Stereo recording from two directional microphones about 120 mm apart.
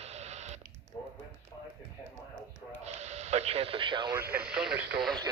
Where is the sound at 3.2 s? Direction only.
60° right (ahead or behind); by 4.1 s 40° right (ahead or behind).